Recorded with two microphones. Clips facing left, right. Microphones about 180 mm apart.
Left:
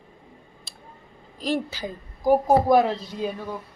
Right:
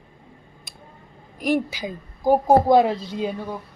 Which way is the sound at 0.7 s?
15° right (ahead or behind).